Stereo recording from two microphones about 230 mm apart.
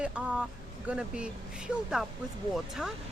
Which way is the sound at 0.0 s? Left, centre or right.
Centre.